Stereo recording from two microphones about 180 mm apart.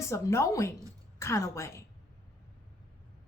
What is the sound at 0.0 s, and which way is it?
A woman's voice, 15° left (ahead or behind).